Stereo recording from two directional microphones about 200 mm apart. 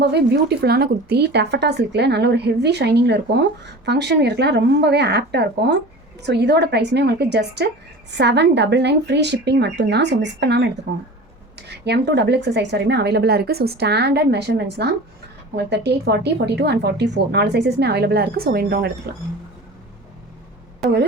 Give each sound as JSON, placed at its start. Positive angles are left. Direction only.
{"t": 0.0, "sound": "speech", "side_deg": -55}